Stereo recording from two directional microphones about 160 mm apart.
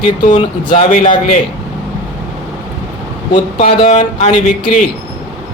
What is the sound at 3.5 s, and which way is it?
A man's voice, 45° left (ahead or behind).